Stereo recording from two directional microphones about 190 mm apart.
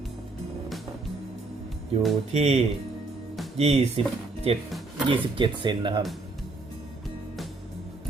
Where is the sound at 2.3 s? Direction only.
35° right (ahead or behind).